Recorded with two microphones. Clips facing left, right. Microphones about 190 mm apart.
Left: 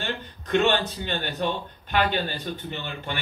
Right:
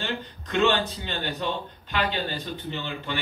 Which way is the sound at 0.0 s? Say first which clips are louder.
Even; 55° left (ahead or behind).